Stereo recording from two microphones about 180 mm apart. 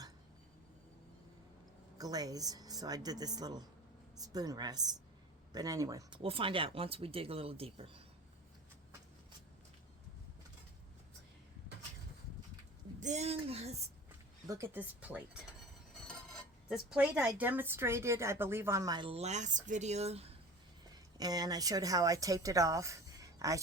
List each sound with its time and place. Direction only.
2.0 s a woman's voice: 20° right (ahead or behind)
13.0 s speech: 40° right (ahead or behind)
14.4 s speech: 15° right (ahead or behind); by 20.2 s 35° right (ahead or behind)
20.8 s a woman's voice: 20° right (ahead or behind)